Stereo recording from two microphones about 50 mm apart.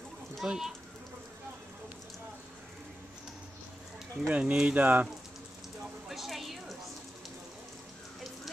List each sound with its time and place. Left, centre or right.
0.4 s speech: centre
4.3 s speech: right
6.0 s a sound: centre